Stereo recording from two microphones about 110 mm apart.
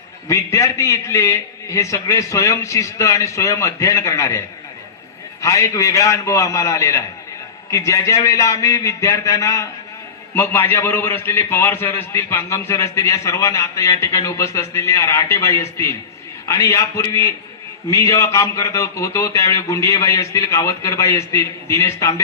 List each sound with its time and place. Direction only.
0.3 s a man's voice: 30° left (ahead or behind)